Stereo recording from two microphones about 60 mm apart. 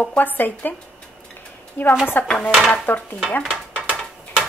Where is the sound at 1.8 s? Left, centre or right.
Left.